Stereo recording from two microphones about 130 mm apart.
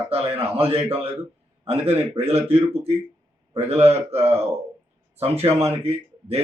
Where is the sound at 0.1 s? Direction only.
50° right (ahead or behind).